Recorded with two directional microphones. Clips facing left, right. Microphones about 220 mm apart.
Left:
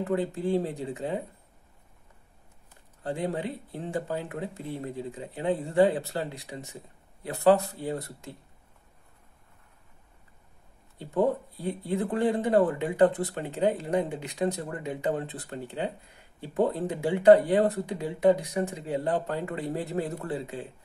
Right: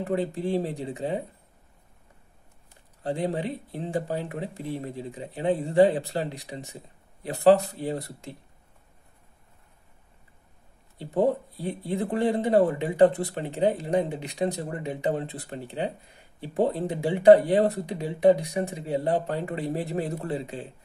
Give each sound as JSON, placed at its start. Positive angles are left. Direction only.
{"t": 0.0, "sound": "speech", "side_deg": -15}
{"t": 3.0, "sound": "speech", "side_deg": -20}
{"t": 11.0, "sound": "speech", "side_deg": -15}